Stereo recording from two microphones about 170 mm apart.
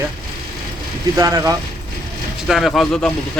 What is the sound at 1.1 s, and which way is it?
Speech, 20° right (ahead or behind).